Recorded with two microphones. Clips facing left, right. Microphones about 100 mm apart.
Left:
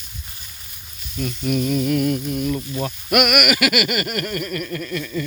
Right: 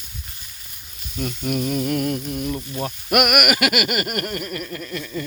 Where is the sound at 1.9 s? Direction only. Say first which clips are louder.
Left 3 dB; 40° right (ahead or behind).